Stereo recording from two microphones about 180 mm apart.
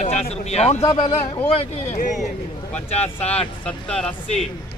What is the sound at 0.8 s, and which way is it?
Speech, 25° left (ahead or behind).